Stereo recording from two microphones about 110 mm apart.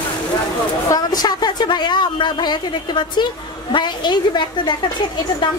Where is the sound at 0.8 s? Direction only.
35° left (ahead or behind).